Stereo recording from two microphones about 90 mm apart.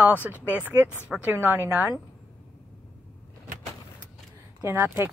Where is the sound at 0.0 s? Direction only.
20° right (ahead or behind).